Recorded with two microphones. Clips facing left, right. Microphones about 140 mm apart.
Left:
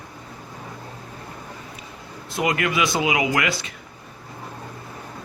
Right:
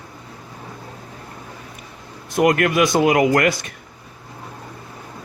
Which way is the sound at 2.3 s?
55° right (ahead or behind).